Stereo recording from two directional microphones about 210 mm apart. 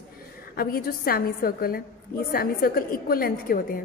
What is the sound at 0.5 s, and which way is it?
A woman's voice, 45° left (ahead or behind).